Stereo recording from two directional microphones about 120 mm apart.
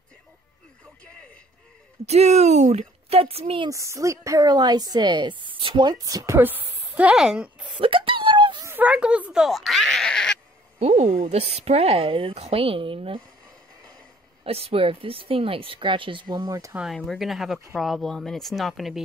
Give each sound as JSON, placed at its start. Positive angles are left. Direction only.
{"t": 2.0, "sound": "speech", "side_deg": -65}
{"t": 3.6, "sound": "a woman's voice", "side_deg": -25}
{"t": 7.8, "sound": "a sound", "side_deg": -45}
{"t": 8.6, "sound": "a sound", "side_deg": -15}
{"t": 10.8, "sound": "speech", "side_deg": -65}
{"t": 14.4, "sound": "speech", "side_deg": -55}
{"t": 16.9, "sound": "speech", "side_deg": 0}